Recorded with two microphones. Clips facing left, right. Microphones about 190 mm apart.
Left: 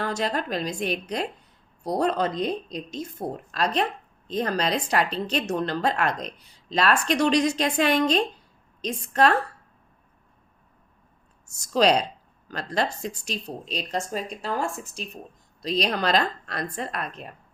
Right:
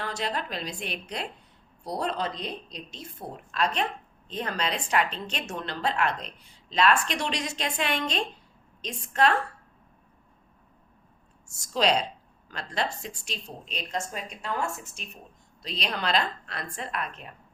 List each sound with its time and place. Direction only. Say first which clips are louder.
0.0 s a woman's voice: left 5 dB; 45° left (ahead or behind)
11.7 s a woman's voice: left 5 dB; 40° left (ahead or behind)